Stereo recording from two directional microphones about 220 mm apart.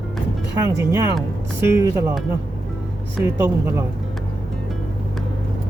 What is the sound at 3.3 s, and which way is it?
Speech, 10° right (ahead or behind).